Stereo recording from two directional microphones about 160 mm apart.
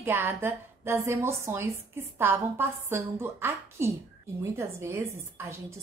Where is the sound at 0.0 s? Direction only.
15° right (ahead or behind).